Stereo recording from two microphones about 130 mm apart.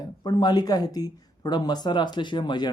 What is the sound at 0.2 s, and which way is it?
Speech, 35° left (ahead or behind).